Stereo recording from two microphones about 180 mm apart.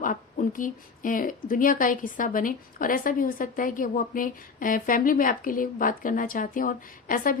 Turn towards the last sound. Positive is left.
turn(degrees=50)  # may be behind; listen again after turning